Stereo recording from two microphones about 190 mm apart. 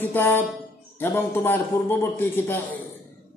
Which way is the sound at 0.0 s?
10° left (ahead or behind).